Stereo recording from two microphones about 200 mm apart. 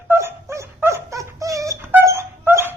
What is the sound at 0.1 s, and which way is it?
Dog, 10° right (ahead or behind).